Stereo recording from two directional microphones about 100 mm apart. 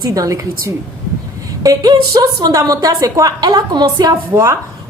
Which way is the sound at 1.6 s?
40° right (ahead or behind).